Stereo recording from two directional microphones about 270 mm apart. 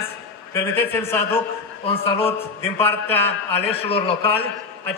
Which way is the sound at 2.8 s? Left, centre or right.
Centre.